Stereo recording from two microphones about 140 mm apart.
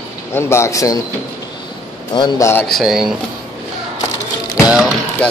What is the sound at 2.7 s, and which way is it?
Speech, 5° right (ahead or behind).